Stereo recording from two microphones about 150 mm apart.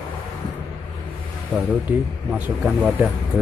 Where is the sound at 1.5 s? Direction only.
10° right (ahead or behind).